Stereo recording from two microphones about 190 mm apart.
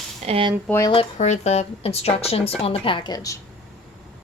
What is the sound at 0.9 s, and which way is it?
Speech, 30° left (ahead or behind).